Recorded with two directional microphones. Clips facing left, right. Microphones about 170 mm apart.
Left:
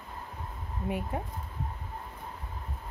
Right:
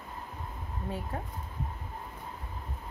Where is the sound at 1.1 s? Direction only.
15° left (ahead or behind).